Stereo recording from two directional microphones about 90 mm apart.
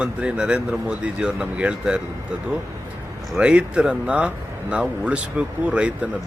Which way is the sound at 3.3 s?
10° right (ahead or behind).